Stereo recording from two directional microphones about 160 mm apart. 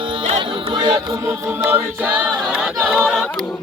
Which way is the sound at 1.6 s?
10° right (ahead or behind).